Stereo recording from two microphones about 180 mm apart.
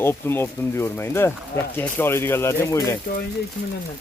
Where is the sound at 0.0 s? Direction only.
15° left (ahead or behind).